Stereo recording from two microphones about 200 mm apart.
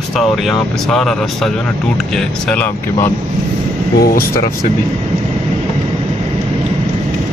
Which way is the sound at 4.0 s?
45° left (ahead or behind).